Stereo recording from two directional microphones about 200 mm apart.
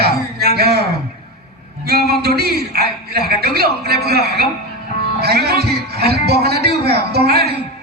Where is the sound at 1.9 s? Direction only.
50° right (ahead or behind).